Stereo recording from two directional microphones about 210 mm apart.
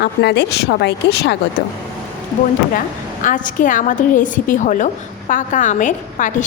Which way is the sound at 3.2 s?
40° left (ahead or behind).